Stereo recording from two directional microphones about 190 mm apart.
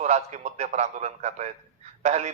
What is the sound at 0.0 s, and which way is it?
A man's voice, 35° right (ahead or behind).